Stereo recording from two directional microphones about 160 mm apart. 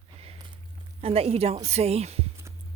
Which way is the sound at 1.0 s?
35° right (ahead or behind).